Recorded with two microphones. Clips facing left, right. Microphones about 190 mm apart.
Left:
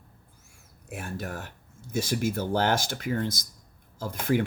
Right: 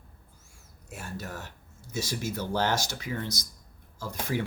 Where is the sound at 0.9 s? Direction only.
55° left (ahead or behind).